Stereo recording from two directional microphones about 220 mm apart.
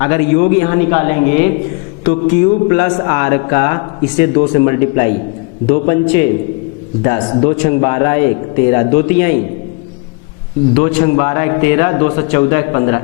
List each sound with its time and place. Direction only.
0.0 s speech: 15° left (ahead or behind)
10.8 s speech: 15° left (ahead or behind)